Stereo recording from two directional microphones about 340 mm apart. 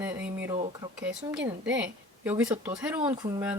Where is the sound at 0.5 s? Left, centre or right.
Centre.